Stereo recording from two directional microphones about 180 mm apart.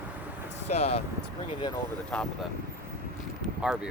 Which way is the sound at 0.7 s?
35° left (ahead or behind).